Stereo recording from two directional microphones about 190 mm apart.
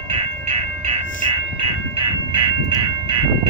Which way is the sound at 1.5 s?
25° right (ahead or behind).